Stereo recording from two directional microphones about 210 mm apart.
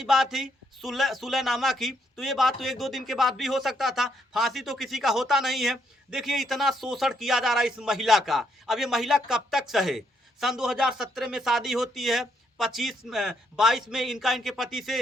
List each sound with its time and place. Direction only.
0.0 s speech: centre (ahead or behind)